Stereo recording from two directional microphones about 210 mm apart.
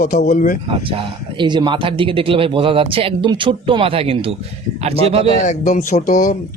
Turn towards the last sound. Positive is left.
turn(degrees=35)  # may be behind; listen again after turning